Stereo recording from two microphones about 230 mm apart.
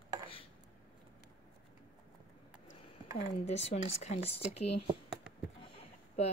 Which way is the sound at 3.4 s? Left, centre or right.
Left.